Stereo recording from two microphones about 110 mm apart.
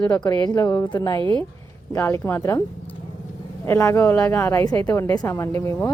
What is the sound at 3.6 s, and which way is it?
A woman's voice, 25° left (ahead or behind).